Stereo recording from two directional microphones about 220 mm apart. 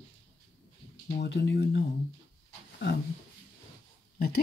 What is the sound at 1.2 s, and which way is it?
Speech, 50° left (ahead or behind).